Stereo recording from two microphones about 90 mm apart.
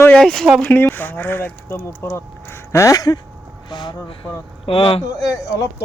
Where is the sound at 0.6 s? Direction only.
25° left (ahead or behind).